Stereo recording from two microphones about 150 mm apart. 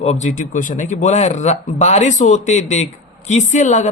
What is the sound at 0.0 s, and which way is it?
Speech, 45° left (ahead or behind).